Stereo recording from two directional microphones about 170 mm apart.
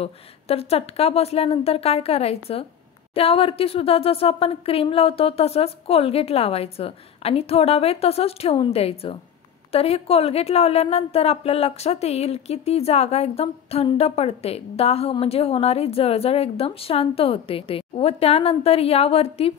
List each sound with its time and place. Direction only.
0.0 s a woman's voice: 35° left (ahead or behind)